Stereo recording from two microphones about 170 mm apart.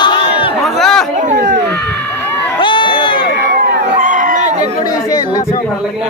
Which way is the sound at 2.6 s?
30° left (ahead or behind).